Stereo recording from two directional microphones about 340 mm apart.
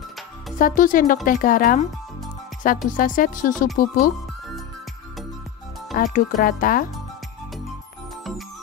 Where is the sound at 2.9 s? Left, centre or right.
Left.